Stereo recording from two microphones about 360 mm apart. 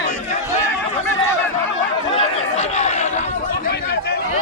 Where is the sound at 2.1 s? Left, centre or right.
Centre.